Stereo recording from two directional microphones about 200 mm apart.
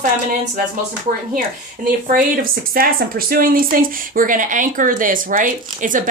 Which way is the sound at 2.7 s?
45° right (ahead or behind).